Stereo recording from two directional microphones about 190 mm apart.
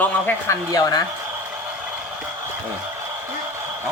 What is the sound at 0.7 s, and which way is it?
Speech, 20° left (ahead or behind).